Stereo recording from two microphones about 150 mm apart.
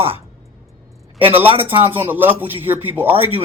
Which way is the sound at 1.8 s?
15° right (ahead or behind).